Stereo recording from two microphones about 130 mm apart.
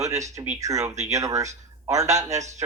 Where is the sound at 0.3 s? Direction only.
60° right (ahead or behind).